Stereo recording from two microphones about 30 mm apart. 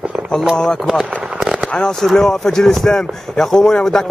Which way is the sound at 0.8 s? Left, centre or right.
Centre.